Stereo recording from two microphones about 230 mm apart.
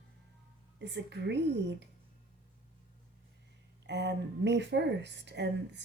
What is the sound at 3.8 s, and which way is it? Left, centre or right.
Speech, right.